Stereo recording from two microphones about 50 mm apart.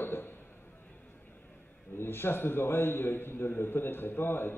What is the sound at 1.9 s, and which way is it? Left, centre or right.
A man's voice, left.